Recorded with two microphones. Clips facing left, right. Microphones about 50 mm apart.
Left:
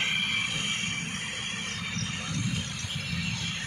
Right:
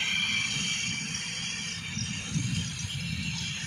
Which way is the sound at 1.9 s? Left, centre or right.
Left.